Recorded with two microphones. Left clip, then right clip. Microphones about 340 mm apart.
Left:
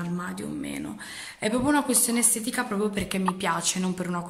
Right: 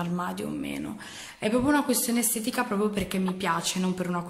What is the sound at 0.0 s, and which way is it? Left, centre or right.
A woman's voice, centre.